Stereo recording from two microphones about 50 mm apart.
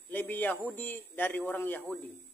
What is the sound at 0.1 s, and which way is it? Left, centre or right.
A man's voice, left.